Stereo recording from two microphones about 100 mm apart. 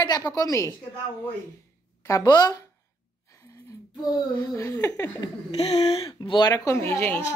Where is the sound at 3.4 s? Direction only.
35° left (ahead or behind).